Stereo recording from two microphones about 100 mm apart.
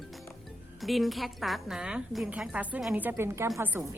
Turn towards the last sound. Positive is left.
turn(degrees=-20)  # may be behind; listen again after turning